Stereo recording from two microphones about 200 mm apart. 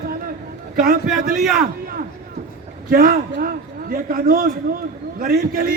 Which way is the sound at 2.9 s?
45° right (ahead or behind).